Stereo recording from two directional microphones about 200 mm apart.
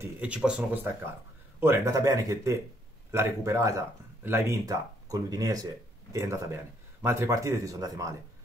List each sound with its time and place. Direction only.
0.0 s speech: 5° right (ahead or behind)